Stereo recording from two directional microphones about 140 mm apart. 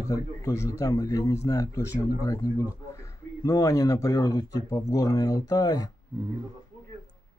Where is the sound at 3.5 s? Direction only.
25° left (ahead or behind).